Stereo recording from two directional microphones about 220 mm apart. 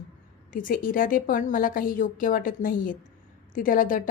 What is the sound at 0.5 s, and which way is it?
A woman's voice, 40° left (ahead or behind).